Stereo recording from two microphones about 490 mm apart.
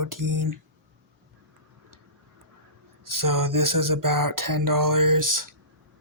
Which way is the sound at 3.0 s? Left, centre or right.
Right.